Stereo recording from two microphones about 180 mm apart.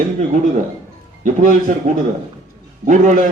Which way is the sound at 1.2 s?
45° right (ahead or behind).